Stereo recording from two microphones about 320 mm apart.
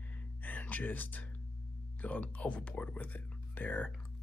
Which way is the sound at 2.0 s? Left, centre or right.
Centre.